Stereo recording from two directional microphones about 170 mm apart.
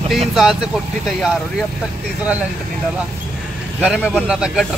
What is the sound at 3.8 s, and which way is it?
Speech, 5° right (ahead or behind).